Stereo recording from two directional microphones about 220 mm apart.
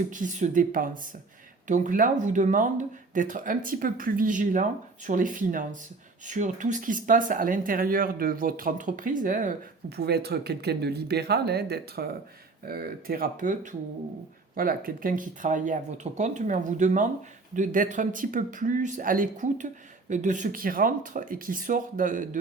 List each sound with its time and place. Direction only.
0.1 s speech: 35° right (ahead or behind)